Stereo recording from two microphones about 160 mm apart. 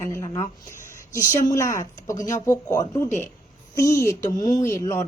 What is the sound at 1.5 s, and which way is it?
Speech, 20° left (ahead or behind).